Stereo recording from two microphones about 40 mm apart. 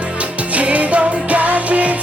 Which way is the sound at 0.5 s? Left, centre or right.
Right.